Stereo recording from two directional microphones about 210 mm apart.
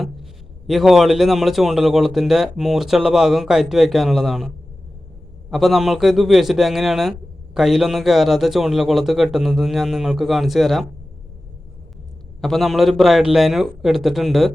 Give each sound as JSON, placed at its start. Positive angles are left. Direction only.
{"t": 0.7, "sound": "a man's voice", "side_deg": 0}
{"t": 12.4, "sound": "a man's voice", "side_deg": 0}